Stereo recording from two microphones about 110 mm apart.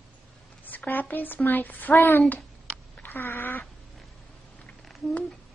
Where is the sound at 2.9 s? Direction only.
20° left (ahead or behind).